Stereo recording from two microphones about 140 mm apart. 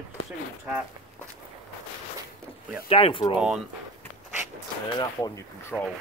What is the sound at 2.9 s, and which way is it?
Speech, 40° left (ahead or behind).